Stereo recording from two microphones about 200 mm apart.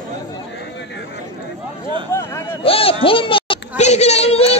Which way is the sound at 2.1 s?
15° left (ahead or behind).